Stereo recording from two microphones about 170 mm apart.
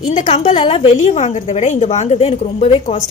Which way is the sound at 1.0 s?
40° left (ahead or behind).